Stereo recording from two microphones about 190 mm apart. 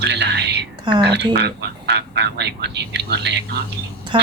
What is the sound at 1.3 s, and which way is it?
Speech, 60° right (ahead or behind).